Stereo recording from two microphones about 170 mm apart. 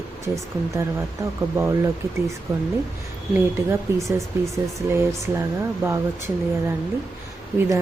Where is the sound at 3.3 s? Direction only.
15° right (ahead or behind).